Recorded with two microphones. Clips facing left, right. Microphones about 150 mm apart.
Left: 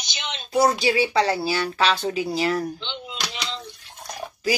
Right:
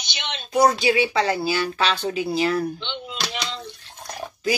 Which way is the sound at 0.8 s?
35° left (ahead or behind).